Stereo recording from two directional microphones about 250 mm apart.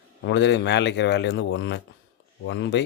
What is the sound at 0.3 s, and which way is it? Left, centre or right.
Speech, left.